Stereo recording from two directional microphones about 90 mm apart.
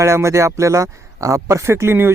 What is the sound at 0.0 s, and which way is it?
Speech, 30° right (ahead or behind).